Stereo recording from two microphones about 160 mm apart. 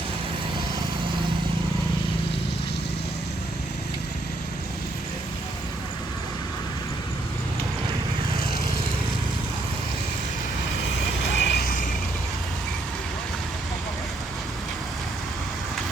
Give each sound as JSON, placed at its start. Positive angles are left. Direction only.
{"t": 11.3, "sound": "vehicle", "side_deg": 90}